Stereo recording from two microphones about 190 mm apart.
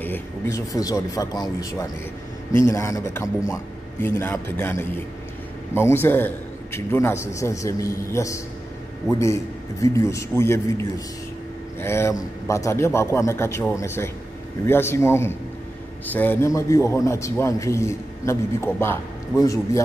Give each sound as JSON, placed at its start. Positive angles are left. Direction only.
{"t": 0.0, "sound": "a man's voice", "side_deg": 15}